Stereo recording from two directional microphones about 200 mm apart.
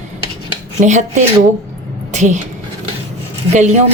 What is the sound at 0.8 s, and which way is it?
A woman's voice, 35° right (ahead or behind).